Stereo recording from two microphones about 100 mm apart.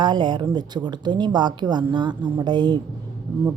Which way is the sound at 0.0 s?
50° right (ahead or behind).